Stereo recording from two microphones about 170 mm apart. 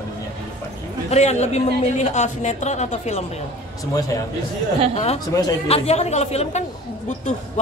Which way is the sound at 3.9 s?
20° left (ahead or behind).